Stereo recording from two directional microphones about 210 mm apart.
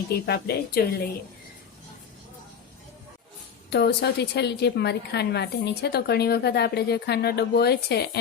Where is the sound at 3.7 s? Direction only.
55° left (ahead or behind).